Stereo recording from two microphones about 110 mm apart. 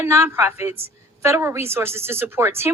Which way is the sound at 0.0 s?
25° right (ahead or behind).